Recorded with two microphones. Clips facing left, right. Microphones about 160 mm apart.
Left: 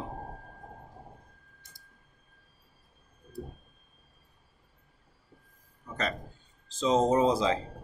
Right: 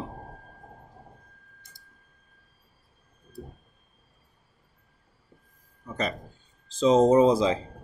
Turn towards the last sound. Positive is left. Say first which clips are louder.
# right 5 dB
turn(degrees=-15)  # may be behind; listen again after turning